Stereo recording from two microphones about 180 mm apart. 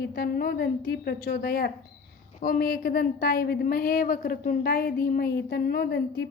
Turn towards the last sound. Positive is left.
turn(degrees=60)  # may be behind; listen again after turning